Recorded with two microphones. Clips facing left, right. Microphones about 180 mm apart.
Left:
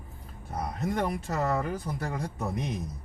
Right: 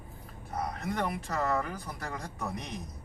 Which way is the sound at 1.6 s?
20° left (ahead or behind).